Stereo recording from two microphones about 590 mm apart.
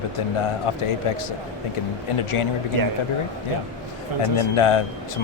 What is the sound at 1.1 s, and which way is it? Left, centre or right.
Speech, left.